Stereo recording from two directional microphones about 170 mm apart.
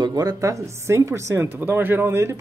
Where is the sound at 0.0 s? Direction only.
20° right (ahead or behind).